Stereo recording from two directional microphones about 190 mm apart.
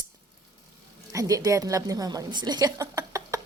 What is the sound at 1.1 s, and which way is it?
A woman's voice, 20° right (ahead or behind).